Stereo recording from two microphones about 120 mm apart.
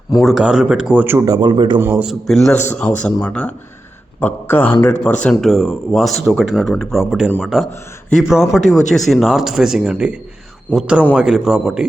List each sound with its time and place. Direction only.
0.2 s speech: 5° right (ahead or behind)
1.2 s speech: 35° right (ahead or behind)
1.8 s speech: 15° right (ahead or behind)
2.0 s speech: centre (ahead or behind)
5.2 s speech: 5° left (ahead or behind)